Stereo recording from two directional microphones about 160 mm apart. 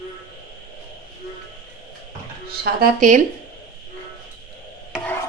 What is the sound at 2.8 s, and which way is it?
Speech, 50° right (ahead or behind).